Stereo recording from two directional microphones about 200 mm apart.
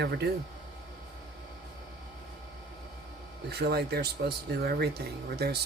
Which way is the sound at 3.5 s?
55° right (ahead or behind).